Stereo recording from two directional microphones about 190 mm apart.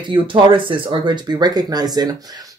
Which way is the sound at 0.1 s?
25° right (ahead or behind).